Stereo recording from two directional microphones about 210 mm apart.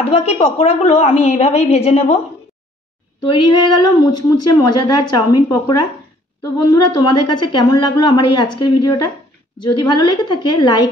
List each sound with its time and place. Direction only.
0.1 s a woman's voice: 30° left (ahead or behind)
3.3 s a woman's voice: 20° left (ahead or behind)